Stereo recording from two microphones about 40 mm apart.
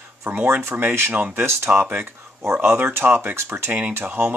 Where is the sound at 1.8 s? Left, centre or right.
Right.